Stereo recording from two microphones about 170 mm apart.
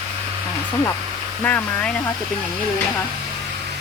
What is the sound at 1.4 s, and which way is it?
Speech, 10° left (ahead or behind).